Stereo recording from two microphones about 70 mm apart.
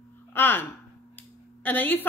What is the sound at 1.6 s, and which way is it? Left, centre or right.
Speech, left.